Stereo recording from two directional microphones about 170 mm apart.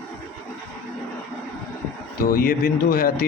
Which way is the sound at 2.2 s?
55° left (ahead or behind).